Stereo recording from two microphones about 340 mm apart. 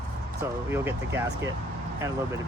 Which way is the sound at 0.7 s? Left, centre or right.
Centre.